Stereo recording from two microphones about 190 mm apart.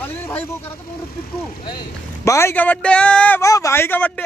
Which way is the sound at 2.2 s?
15° left (ahead or behind).